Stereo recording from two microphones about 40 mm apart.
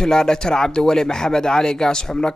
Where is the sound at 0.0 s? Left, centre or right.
Centre.